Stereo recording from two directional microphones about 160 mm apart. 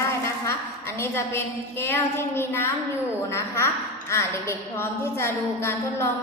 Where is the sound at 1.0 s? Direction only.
15° left (ahead or behind).